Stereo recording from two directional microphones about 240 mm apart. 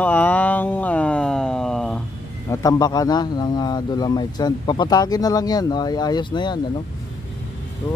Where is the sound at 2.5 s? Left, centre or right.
Centre.